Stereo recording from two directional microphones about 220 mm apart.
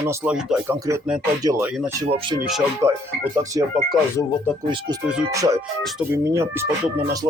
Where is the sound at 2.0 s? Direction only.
25° right (ahead or behind).